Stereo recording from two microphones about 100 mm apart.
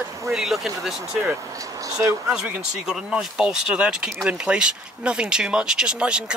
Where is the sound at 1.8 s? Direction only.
35° right (ahead or behind).